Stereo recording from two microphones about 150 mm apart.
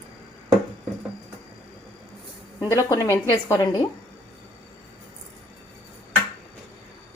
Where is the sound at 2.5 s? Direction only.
20° left (ahead or behind).